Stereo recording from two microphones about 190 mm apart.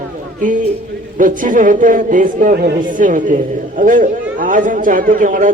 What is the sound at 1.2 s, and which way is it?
A man's voice, 45° right (ahead or behind).